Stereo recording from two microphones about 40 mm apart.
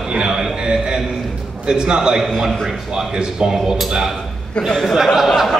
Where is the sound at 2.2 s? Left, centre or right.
Centre.